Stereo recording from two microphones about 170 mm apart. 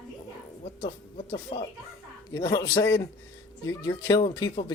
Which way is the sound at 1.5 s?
30° left (ahead or behind).